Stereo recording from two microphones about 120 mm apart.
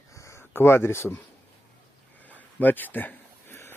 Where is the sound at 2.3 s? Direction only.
15° left (ahead or behind).